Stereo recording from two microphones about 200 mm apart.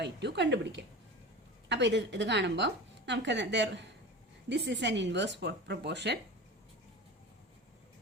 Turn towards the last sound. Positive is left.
turn(degrees=-60)  # may be behind; listen again after turning